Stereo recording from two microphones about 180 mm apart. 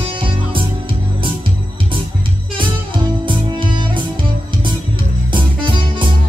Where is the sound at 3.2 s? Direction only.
25° right (ahead or behind).